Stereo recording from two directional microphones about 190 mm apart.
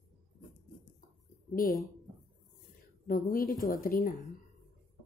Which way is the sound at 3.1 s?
50° left (ahead or behind).